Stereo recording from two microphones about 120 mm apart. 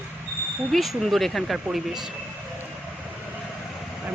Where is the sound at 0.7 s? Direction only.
Centre (ahead or behind).